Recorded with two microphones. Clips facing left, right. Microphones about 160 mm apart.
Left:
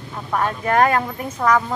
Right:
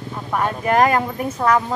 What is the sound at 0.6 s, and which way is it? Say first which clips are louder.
Speech: right 1 dB; 15° right (ahead or behind).